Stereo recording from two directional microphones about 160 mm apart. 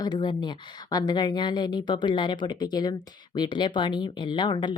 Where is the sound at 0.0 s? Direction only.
25° left (ahead or behind).